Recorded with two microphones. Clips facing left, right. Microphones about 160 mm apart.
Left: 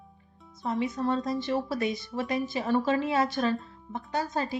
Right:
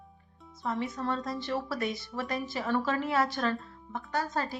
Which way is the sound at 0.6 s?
20° left (ahead or behind).